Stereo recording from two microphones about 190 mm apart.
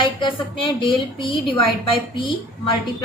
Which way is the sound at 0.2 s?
25° left (ahead or behind).